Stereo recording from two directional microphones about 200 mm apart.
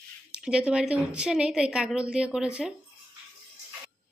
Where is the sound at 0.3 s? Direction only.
5° right (ahead or behind).